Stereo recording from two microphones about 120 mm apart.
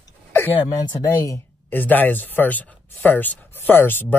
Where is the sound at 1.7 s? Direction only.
15° left (ahead or behind).